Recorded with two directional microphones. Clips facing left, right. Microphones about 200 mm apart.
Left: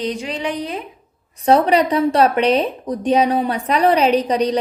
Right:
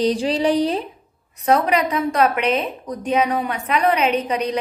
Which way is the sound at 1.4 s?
30° left (ahead or behind).